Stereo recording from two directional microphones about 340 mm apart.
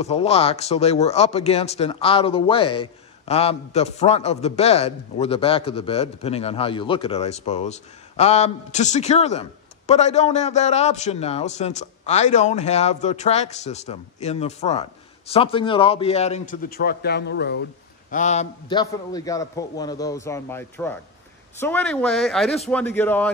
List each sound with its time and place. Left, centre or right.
0.0 s a man's voice: centre